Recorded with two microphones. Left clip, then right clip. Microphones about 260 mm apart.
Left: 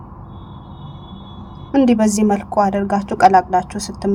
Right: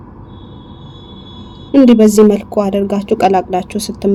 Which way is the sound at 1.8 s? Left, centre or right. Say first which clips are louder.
Right 9 dB; left.